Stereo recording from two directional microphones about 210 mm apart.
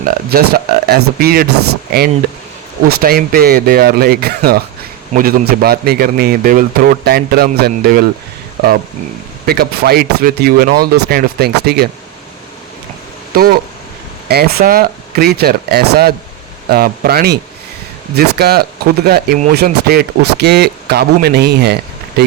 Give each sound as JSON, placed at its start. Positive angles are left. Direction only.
{"t": 0.0, "sound": "a man's voice", "side_deg": -45}
{"t": 2.8, "sound": "a man's voice", "side_deg": -45}
{"t": 9.5, "sound": "a man's voice", "side_deg": -50}
{"t": 13.3, "sound": "a man's voice", "side_deg": -45}